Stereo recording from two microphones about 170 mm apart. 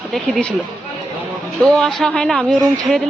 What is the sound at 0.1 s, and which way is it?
Speech, 5° left (ahead or behind).